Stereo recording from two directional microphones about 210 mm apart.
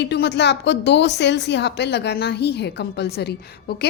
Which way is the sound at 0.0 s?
55° left (ahead or behind).